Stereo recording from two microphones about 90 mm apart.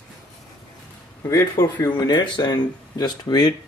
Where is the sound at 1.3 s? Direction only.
30° left (ahead or behind).